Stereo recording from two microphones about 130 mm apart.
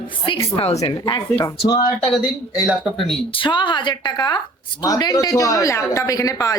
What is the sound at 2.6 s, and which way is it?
Speech, centre (ahead or behind).